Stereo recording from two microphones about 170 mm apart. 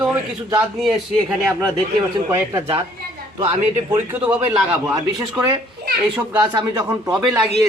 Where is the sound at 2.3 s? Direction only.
15° right (ahead or behind).